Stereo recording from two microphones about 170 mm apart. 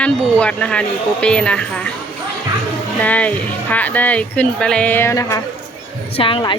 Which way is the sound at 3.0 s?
10° left (ahead or behind).